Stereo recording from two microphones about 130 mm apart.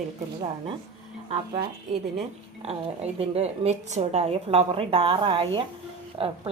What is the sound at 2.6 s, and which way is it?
A woman's voice, 50° right (ahead or behind).